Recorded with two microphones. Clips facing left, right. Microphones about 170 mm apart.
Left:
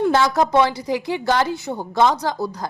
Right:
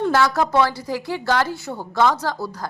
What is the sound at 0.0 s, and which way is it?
A woman's voice, 15° left (ahead or behind).